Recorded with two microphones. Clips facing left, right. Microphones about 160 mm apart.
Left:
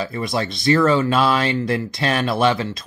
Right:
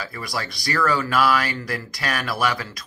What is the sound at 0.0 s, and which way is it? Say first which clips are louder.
Speech: left 7 dB; 25° left (ahead or behind).